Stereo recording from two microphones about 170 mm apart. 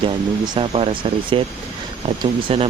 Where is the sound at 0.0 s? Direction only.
30° right (ahead or behind).